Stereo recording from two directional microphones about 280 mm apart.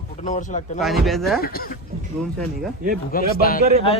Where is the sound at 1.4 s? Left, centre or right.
Left.